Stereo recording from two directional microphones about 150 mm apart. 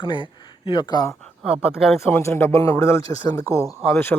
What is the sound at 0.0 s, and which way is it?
Speech, 35° left (ahead or behind).